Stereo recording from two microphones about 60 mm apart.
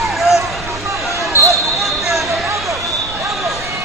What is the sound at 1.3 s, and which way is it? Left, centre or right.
Basketball bounce, left.